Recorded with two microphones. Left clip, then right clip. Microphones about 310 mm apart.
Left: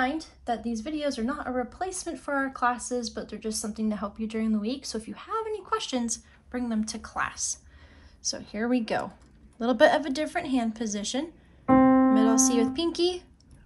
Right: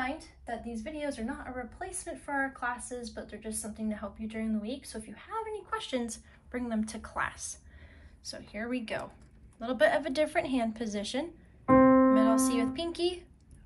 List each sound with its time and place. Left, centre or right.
0.0 s a woman's voice: centre
11.7 s piano: centre
12.4 s a woman's voice: centre